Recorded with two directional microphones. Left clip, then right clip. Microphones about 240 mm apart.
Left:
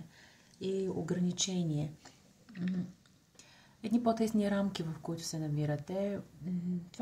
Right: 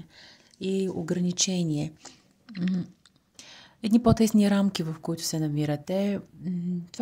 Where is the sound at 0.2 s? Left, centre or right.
Right.